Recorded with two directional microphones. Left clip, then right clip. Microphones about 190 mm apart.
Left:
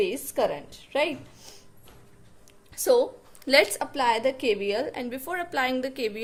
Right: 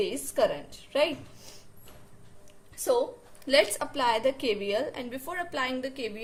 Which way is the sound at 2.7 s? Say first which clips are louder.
Left 5 dB; 50° left (ahead or behind).